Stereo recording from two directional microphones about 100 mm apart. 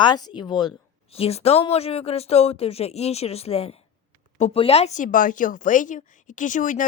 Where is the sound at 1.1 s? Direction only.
85° left.